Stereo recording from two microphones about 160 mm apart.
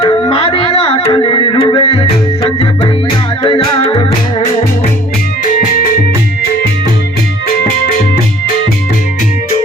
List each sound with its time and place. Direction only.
0.0 s music: 25° left (ahead or behind)